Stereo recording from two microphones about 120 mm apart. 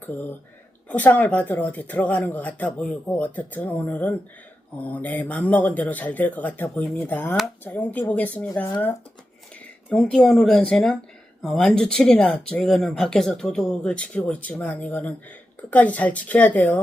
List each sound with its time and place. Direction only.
0.0 s speech: 15° left (ahead or behind)
9.9 s speech: 10° left (ahead or behind)